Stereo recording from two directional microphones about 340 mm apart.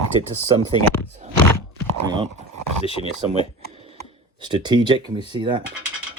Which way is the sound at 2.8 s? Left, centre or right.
Centre.